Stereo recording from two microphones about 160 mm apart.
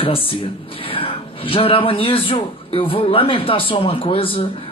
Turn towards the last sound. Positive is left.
turn(degrees=35)  # may be behind; listen again after turning